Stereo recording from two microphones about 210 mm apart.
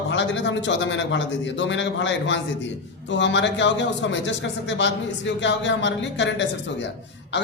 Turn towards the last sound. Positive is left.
turn(degrees=60)  # may be behind; listen again after turning